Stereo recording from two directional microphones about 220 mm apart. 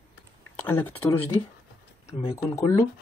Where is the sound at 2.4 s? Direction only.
15° left (ahead or behind).